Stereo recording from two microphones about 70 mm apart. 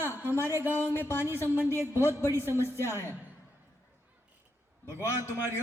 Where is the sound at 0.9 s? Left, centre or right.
Left.